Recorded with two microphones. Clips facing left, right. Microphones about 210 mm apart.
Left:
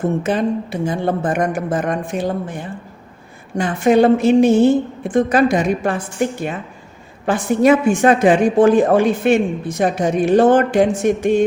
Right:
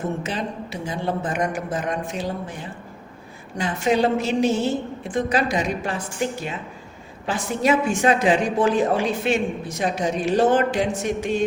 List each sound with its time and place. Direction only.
0.2 s a woman's voice: 55° left (ahead or behind)